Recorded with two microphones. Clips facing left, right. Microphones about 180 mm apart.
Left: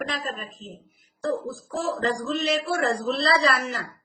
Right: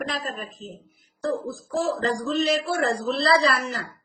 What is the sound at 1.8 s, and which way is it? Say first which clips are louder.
A woman's voice: even; 35° right (ahead or behind).